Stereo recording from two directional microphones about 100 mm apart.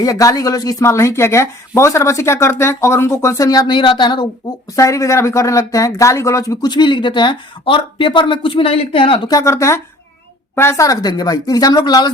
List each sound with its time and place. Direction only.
0.0 s speech: 35° left (ahead or behind)
4.8 s speech: 30° left (ahead or behind)
6.7 s speech: 50° left (ahead or behind)
9.3 s speech: 30° left (ahead or behind)